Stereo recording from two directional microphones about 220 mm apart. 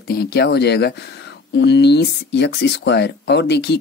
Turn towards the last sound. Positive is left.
turn(degrees=50)  # may be behind; listen again after turning